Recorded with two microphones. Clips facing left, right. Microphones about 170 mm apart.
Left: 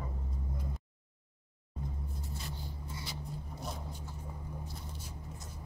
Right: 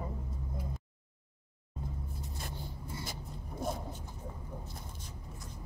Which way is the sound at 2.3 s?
50° right (ahead or behind).